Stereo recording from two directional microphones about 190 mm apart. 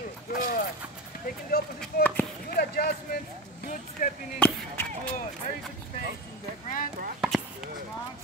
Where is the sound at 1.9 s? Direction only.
50° left (ahead or behind).